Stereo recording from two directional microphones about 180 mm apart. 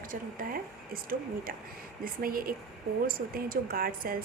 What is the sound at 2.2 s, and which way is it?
A woman's voice, 55° right (ahead or behind).